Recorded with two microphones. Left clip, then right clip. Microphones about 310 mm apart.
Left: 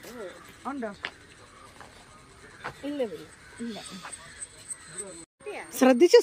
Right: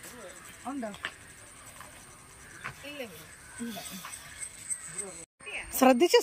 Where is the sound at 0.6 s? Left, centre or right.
Centre.